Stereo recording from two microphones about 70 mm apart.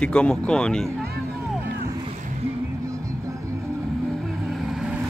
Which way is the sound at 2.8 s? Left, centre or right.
Right.